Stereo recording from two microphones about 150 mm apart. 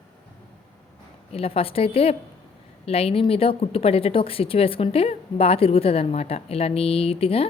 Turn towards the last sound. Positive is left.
turn(degrees=40)  # may be behind; listen again after turning